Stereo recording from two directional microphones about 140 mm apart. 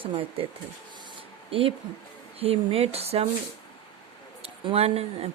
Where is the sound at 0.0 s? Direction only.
40° right (ahead or behind).